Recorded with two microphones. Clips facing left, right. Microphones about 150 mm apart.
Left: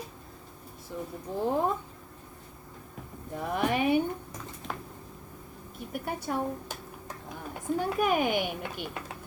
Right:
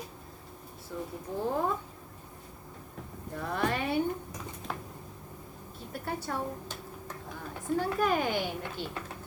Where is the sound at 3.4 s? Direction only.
15° left (ahead or behind).